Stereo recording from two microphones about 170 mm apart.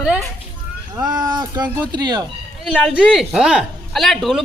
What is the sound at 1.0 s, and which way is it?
Speech, 25° right (ahead or behind).